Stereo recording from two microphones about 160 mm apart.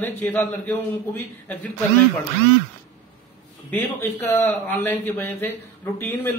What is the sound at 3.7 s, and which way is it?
A man's voice, 10° left (ahead or behind).